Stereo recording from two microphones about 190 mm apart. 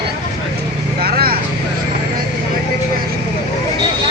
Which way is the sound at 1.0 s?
55° right (ahead or behind).